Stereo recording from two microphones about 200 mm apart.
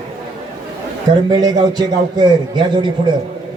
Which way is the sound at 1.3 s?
20° right (ahead or behind).